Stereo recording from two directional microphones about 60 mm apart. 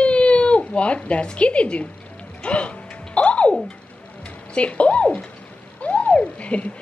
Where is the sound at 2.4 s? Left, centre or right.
Centre.